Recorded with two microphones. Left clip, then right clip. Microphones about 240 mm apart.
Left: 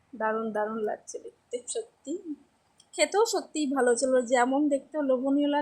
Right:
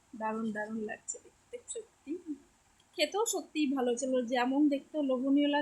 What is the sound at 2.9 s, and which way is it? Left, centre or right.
A woman's voice, centre.